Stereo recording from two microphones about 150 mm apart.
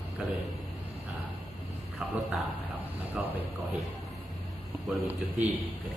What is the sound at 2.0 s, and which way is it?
Speech, 5° right (ahead or behind).